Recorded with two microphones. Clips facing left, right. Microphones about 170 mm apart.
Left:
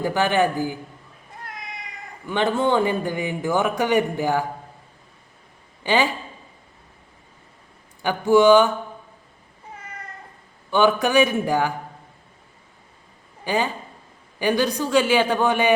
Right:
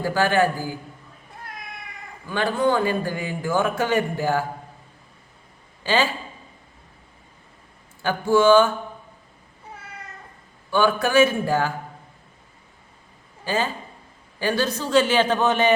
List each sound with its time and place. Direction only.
0.0 s speech: 20° left (ahead or behind)
2.2 s speech: 20° left (ahead or behind)
5.8 s a man's voice: 15° left (ahead or behind)
8.0 s a man's voice: 15° left (ahead or behind)
10.7 s a man's voice: 20° left (ahead or behind)
13.4 s a man's voice: 15° left (ahead or behind)